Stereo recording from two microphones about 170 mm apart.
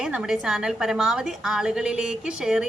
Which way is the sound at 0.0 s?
5° right (ahead or behind).